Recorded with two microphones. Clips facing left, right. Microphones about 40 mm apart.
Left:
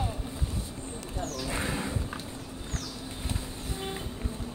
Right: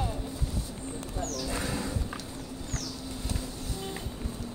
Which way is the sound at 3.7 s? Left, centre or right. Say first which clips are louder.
Left 3 dB; left.